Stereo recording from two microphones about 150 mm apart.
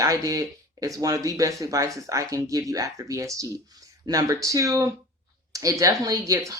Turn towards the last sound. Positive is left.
turn(degrees=-20)  # may be behind; listen again after turning